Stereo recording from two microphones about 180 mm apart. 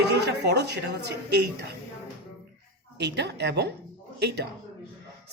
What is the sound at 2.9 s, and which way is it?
Speech, 70° right (ahead or behind).